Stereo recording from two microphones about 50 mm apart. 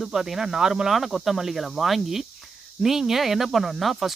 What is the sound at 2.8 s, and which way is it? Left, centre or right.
Cricket, centre.